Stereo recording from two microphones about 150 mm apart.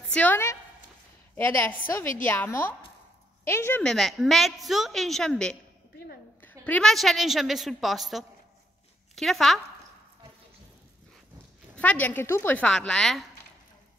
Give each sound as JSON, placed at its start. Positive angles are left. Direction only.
{"t": 0.1, "sound": "speech", "side_deg": 10}
{"t": 3.8, "sound": "a woman's voice", "side_deg": 0}
{"t": 6.6, "sound": "a woman's voice", "side_deg": 5}
{"t": 11.7, "sound": "speech", "side_deg": 10}